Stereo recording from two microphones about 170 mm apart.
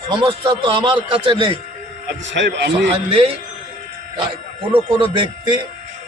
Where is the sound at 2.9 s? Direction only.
35° right (ahead or behind).